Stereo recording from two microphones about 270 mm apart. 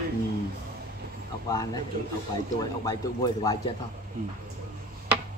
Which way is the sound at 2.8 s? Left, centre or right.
Centre.